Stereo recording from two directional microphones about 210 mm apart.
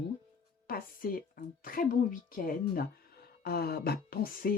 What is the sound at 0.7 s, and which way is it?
Speech, 45° left (ahead or behind).